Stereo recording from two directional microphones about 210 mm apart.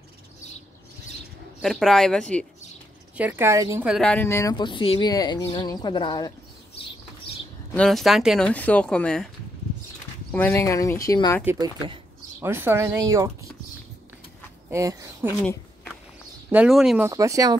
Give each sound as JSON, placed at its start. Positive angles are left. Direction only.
{"t": 1.6, "sound": "speech", "side_deg": 0}
{"t": 3.2, "sound": "speech", "side_deg": -10}
{"t": 3.8, "sound": "speech", "side_deg": 0}
{"t": 7.7, "sound": "speech", "side_deg": 5}
{"t": 10.3, "sound": "speech", "side_deg": 10}
{"t": 11.4, "sound": "speech", "side_deg": -20}
{"t": 14.7, "sound": "speech", "side_deg": -15}
{"t": 15.4, "sound": "a sound", "side_deg": 5}
{"t": 16.4, "sound": "speech", "side_deg": -5}
{"t": 17.1, "sound": "speech", "side_deg": -15}